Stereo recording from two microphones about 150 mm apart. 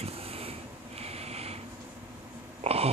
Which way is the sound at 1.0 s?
45° right (ahead or behind).